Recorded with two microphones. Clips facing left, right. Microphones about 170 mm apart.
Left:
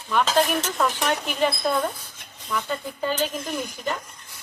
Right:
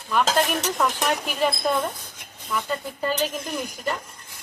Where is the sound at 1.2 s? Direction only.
5° right (ahead or behind).